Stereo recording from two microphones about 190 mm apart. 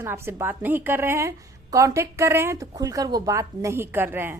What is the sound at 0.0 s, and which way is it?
A woman's voice, 10° right (ahead or behind).